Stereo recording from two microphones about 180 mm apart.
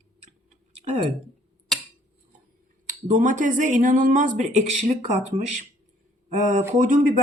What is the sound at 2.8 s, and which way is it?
Speech, 45° right (ahead or behind).